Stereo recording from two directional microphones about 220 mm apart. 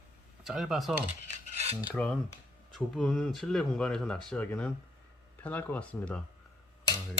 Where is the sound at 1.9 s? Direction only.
5° left (ahead or behind).